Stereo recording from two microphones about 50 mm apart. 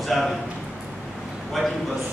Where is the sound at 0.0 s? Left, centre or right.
Centre.